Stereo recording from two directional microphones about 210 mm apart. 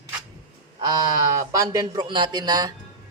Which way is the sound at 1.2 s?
15° right (ahead or behind).